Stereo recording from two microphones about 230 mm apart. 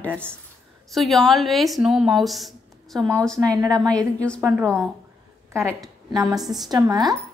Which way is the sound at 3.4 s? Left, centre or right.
Centre.